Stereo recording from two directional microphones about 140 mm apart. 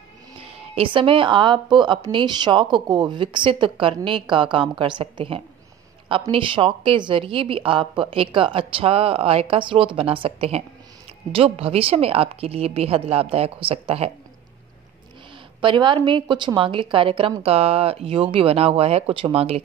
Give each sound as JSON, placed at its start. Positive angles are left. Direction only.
{"t": 0.4, "sound": "a woman's voice", "side_deg": -45}
{"t": 15.6, "sound": "a woman's voice", "side_deg": -35}